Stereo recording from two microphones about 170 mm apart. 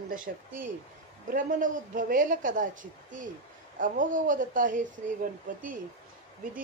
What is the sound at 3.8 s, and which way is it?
A woman's voice, 50° right (ahead or behind).